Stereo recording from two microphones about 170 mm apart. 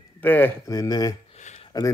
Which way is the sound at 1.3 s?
45° left (ahead or behind).